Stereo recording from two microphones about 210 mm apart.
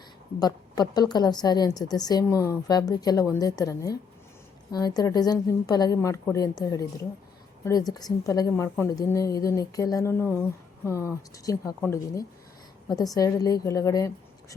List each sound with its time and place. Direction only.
0.3 s a woman's voice: 20° left (ahead or behind)